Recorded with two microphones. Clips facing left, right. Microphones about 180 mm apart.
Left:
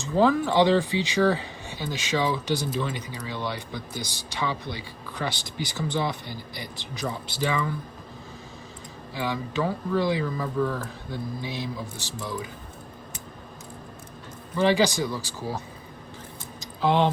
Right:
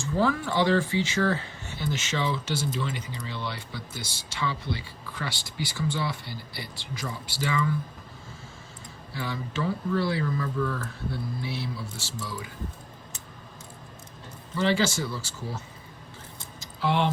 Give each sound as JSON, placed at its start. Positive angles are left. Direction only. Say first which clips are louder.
{"t": 0.0, "sound": "speech", "louder": "left 4 dB", "side_deg": 15}
{"t": 9.1, "sound": "speech", "louder": "left 4 dB", "side_deg": 15}
{"t": 14.6, "sound": "speech", "louder": "left 4 dB", "side_deg": 15}
{"t": 16.6, "sound": "a sound", "louder": "left 4 dB", "side_deg": 15}